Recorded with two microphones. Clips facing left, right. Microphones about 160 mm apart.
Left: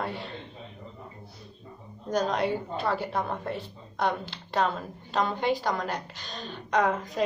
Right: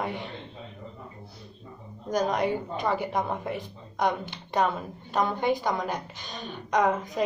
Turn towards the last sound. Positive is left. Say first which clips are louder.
# right 1 dB
turn(degrees=-10)  # may be behind; listen again after turning